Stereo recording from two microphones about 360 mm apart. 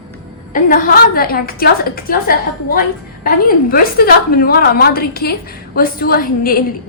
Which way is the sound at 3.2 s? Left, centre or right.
Left.